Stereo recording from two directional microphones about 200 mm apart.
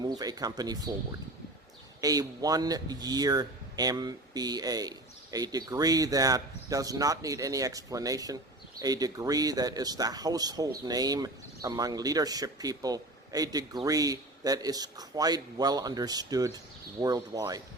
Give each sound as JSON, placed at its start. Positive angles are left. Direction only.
{"t": 0.0, "sound": "speech", "side_deg": -20}
{"t": 2.0, "sound": "speech", "side_deg": -20}